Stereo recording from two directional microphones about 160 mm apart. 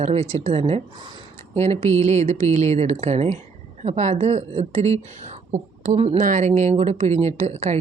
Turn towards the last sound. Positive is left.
turn(degrees=-45)  # may be behind; listen again after turning